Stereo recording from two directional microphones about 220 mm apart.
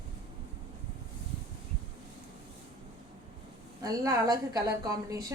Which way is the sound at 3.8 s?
15° right (ahead or behind).